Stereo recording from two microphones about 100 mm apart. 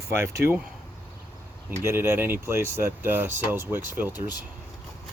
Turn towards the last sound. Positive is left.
turn(degrees=-20)  # may be behind; listen again after turning